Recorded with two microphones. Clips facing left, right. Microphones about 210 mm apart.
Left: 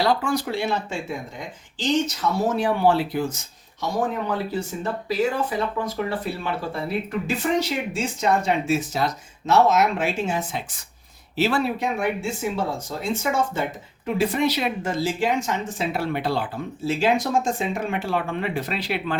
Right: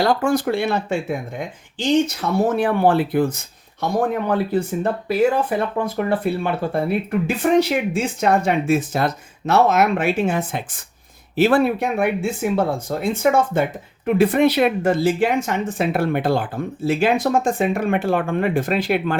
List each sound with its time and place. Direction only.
0.0 s speech: 50° right (ahead or behind)